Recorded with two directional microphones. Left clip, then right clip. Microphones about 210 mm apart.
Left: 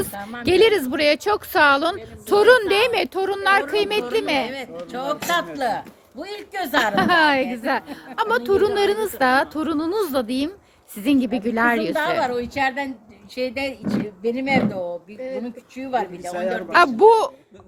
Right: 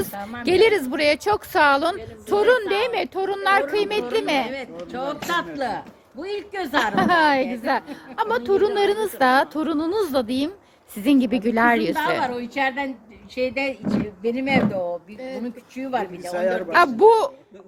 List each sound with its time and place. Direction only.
0.2 s a woman's voice: 10° left (ahead or behind)
2.0 s a woman's voice: 25° left (ahead or behind); by 4.5 s 5° left (ahead or behind)
4.9 s a woman's voice: 40° left (ahead or behind)
6.9 s a woman's voice: 5° left (ahead or behind)
12.2 s a woman's voice: 20° left (ahead or behind); by 16.3 s centre (ahead or behind)
16.3 s a woman's voice: 15° right (ahead or behind)
16.6 s a woman's voice: 15° left (ahead or behind)